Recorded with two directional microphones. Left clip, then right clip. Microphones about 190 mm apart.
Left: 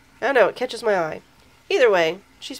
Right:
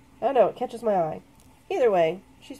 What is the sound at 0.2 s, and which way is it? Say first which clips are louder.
Speech: left 3 dB; 20° left (ahead or behind).